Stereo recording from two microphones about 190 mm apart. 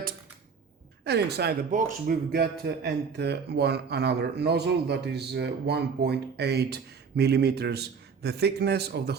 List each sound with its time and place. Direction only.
1.0 s a man's voice: 60° right (ahead or behind)